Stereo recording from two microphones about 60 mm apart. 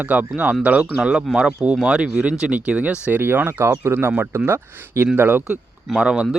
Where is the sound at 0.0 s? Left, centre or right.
Right.